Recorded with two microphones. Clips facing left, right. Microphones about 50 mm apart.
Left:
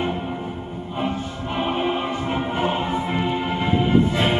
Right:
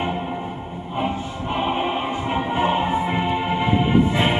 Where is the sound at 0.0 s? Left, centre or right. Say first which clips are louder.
Even; centre.